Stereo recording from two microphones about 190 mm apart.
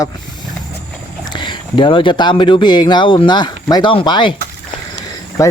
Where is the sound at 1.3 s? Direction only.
25° left (ahead or behind).